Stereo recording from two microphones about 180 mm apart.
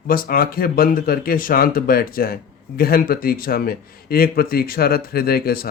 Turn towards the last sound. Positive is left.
turn(degrees=55)  # may be behind; listen again after turning